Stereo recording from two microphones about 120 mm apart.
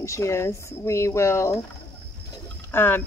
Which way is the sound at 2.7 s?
20° left (ahead or behind).